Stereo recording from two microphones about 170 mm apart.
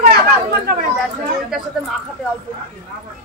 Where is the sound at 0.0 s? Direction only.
65° right (ahead or behind).